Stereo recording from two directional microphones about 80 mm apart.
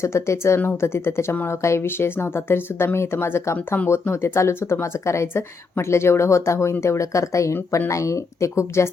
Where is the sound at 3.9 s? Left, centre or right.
Left.